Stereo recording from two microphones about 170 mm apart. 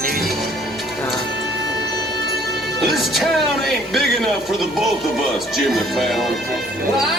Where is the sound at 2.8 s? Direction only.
Centre (ahead or behind).